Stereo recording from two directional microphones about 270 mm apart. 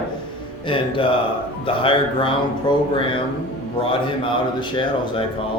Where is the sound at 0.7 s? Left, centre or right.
Centre.